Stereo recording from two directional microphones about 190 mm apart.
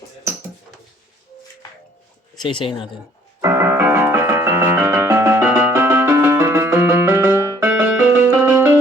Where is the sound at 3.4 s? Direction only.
15° right (ahead or behind).